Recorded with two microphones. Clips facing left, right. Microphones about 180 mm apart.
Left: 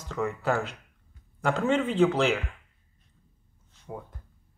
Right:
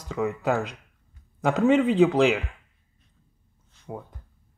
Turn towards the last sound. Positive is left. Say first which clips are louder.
# right 2 dB
turn(degrees=-20)  # may be behind; listen again after turning